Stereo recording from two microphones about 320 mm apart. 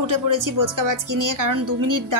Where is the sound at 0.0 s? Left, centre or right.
Right.